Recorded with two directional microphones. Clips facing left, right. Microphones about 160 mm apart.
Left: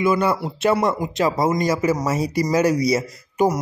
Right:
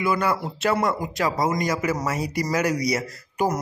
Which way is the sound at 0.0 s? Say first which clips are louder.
Left 4 dB; 20° left (ahead or behind).